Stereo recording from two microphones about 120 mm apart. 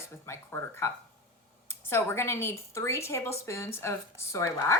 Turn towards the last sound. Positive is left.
turn(degrees=25)  # may be behind; listen again after turning